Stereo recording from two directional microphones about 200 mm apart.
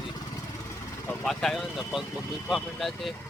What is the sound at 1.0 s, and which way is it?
Speech, centre (ahead or behind).